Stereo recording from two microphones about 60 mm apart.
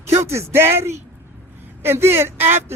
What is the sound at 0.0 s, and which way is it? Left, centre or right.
A man's voice, right.